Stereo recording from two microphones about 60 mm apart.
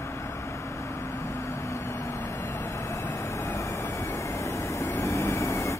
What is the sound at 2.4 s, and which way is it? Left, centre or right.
Vehicle, left.